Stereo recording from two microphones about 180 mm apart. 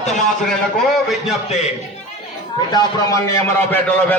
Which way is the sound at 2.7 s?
20° left (ahead or behind).